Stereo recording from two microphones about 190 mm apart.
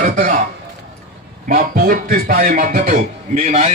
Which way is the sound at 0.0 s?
45° right (ahead or behind).